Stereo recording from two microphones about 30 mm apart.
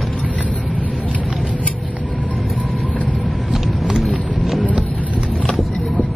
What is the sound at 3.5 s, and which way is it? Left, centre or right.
Vehicle, centre.